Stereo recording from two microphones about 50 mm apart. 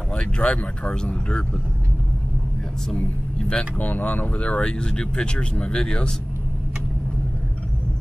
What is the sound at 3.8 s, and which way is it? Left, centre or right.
Speech, left.